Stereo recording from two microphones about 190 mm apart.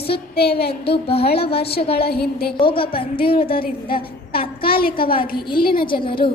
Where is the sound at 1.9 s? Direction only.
55° left (ahead or behind).